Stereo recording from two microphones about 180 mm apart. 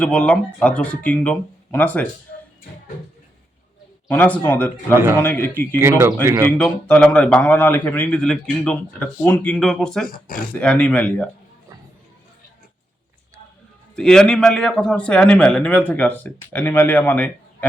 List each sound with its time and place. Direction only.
0.0 s a man's voice: 5° left (ahead or behind)
4.1 s a man's voice: 10° left (ahead or behind)
5.8 s speech: 15° right (ahead or behind)
6.6 s a man's voice: 5° left (ahead or behind)
10.1 s speech: 50° left (ahead or behind)
10.5 s a man's voice: 5° left (ahead or behind)
13.9 s a man's voice: 5° left (ahead or behind)